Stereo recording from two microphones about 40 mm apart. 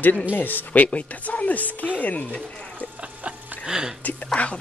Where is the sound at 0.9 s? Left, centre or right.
Left.